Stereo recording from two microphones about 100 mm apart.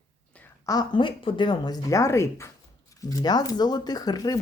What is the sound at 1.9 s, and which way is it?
Speech, 30° left (ahead or behind).